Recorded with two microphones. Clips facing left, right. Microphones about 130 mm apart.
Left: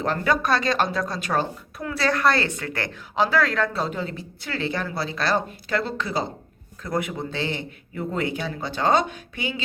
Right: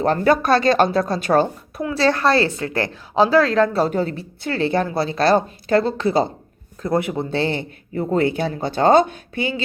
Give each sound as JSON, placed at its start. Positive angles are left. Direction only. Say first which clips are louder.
{"t": 0.2, "sound": "a woman's voice", "louder": "right 6 dB", "side_deg": -30}
{"t": 4.9, "sound": "a woman's voice", "louder": "right 7 dB", "side_deg": -30}
{"t": 5.2, "sound": "speech", "louder": "right 8 dB", "side_deg": -45}
{"t": 6.8, "sound": "speech", "louder": "right 6 dB", "side_deg": -30}